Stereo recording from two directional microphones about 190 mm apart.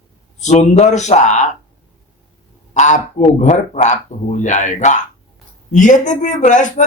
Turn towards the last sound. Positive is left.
turn(degrees=40)  # may be behind; listen again after turning